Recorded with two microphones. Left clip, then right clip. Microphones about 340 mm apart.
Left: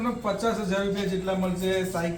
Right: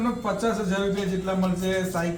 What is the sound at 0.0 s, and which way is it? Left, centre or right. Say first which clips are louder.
A man's voice: right 1 dB; centre.